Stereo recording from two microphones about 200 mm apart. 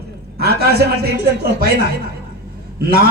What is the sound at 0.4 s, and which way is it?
A man's voice, 50° right (ahead or behind).